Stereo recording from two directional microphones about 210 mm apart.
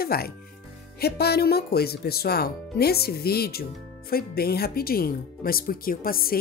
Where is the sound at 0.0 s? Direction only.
45° left (ahead or behind).